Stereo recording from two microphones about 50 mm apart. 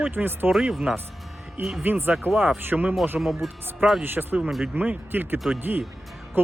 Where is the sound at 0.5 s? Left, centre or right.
Centre.